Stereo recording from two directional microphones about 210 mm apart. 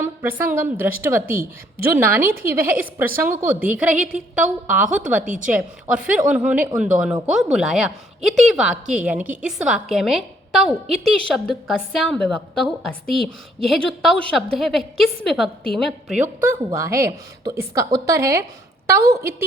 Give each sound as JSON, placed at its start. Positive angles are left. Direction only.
{"t": 0.0, "sound": "a woman's voice", "side_deg": -10}
{"t": 5.2, "sound": "a woman's voice", "side_deg": -40}
{"t": 5.5, "sound": "a woman's voice", "side_deg": -5}
{"t": 16.2, "sound": "a woman's voice", "side_deg": -10}